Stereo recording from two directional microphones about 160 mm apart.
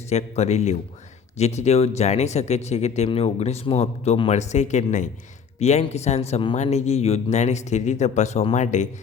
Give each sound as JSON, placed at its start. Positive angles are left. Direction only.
{"t": 0.1, "sound": "speech", "side_deg": 45}